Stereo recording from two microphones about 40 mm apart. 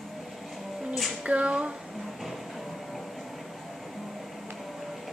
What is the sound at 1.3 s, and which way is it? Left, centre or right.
Speech, right.